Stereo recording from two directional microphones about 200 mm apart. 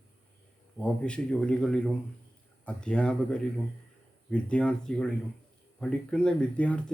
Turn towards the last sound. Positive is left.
turn(degrees=5)  # may be behind; listen again after turning